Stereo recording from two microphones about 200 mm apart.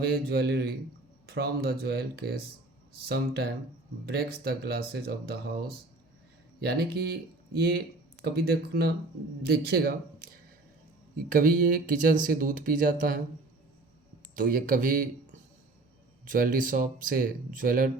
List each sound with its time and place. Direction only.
0.0 s speech: 50° right (ahead or behind)
6.6 s speech: 55° right (ahead or behind)
11.3 s speech: 45° right (ahead or behind)
14.3 s speech: 45° right (ahead or behind)